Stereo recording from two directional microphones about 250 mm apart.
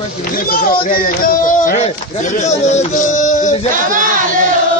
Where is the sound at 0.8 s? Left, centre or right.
Left.